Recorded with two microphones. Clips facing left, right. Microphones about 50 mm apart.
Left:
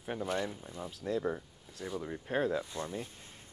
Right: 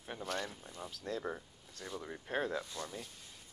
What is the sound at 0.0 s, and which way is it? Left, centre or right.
Speech, centre.